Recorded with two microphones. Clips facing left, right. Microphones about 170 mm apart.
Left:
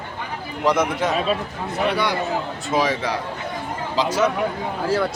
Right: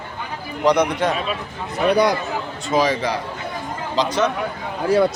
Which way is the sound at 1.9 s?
40° right (ahead or behind).